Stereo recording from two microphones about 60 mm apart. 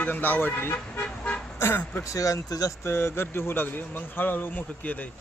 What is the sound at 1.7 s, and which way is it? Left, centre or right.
Speech, left.